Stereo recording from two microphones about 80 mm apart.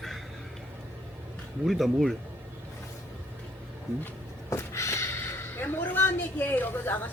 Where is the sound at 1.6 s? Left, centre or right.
Centre.